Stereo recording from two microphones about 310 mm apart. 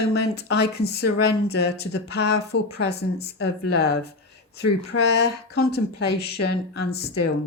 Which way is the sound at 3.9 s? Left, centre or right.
Left.